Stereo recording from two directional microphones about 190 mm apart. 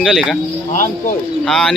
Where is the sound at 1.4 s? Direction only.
Centre (ahead or behind).